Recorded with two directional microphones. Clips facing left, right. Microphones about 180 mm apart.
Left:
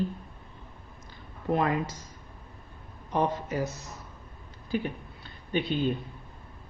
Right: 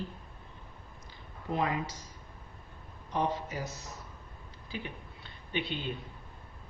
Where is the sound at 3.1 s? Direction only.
55° left (ahead or behind).